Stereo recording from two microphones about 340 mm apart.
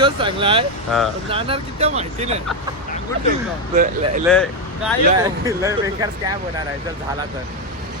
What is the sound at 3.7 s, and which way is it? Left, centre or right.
Speech, right.